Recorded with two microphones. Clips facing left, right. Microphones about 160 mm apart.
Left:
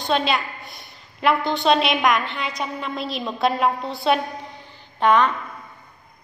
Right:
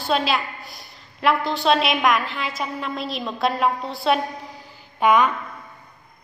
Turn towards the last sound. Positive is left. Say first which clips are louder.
# even
turn(degrees=-10)  # may be behind; listen again after turning